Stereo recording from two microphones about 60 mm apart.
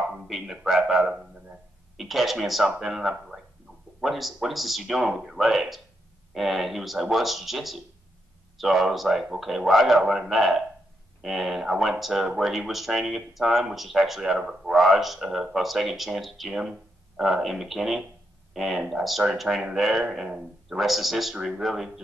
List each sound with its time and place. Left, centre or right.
0.3 s speech: centre